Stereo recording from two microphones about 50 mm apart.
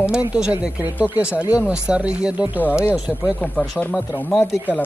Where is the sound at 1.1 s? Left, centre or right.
Right.